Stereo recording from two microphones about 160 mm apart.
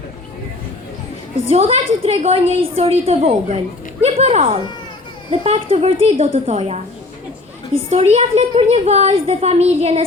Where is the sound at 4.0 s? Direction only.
45° right (ahead or behind).